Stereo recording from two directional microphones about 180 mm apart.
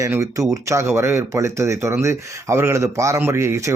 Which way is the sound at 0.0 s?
15° right (ahead or behind).